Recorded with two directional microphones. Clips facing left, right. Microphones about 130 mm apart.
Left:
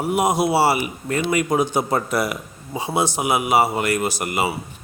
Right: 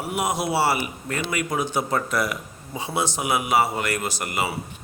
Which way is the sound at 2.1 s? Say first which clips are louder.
Left 3 dB; 10° left (ahead or behind).